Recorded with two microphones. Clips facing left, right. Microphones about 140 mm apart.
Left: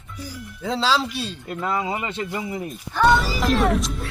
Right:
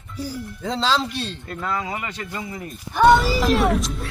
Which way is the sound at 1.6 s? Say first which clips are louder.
Left 2 dB; 20° left (ahead or behind).